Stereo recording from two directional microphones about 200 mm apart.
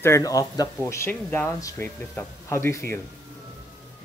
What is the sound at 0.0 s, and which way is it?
Speech, 15° left (ahead or behind).